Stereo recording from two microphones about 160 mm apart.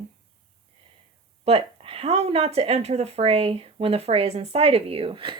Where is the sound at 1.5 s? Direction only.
35° right (ahead or behind).